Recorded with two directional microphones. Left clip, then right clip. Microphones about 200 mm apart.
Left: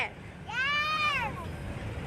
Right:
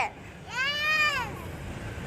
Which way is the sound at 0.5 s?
25° right (ahead or behind).